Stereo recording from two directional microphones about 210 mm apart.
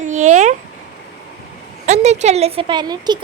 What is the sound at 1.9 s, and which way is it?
Speech, 30° right (ahead or behind).